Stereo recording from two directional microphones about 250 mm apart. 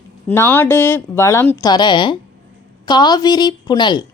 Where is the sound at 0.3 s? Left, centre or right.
Centre.